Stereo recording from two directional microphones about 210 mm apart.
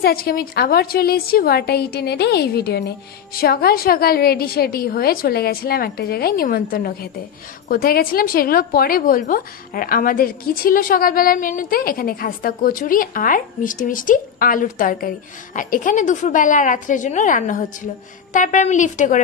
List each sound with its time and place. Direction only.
0.0 s a woman's voice: 45° left (ahead or behind)